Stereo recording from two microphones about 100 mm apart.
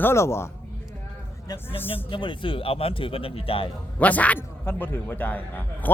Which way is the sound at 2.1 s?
55° left (ahead or behind).